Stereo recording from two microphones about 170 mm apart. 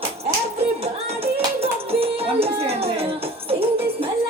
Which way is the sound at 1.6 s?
35° right (ahead or behind).